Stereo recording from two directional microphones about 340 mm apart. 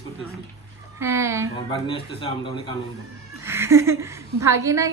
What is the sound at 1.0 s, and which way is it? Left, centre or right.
Speech, centre.